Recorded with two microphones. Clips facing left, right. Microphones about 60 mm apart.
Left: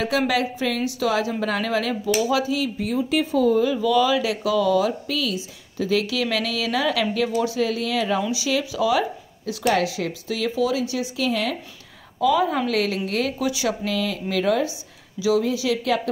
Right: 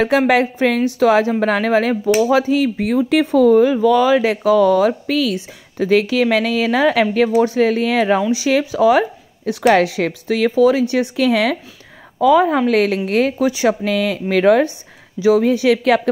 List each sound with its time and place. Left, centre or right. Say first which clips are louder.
0.3 s a woman's voice: right 8 dB; right
3.6 s a woman's voice: right 6 dB; right
9.6 s speech: right 8 dB; right
12.2 s a woman's voice: right 7 dB; right
15.1 s speech: right 7 dB; right